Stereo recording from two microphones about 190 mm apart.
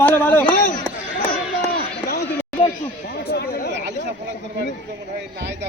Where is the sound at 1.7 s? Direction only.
55° left (ahead or behind).